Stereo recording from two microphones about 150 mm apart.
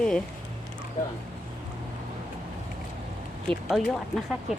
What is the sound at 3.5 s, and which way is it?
Speech, centre (ahead or behind).